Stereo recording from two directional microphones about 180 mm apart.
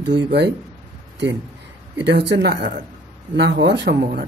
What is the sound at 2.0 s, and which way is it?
Speech, 75° right (ahead or behind).